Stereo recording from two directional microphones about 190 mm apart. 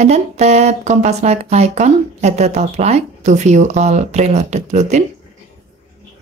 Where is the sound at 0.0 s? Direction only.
35° right (ahead or behind).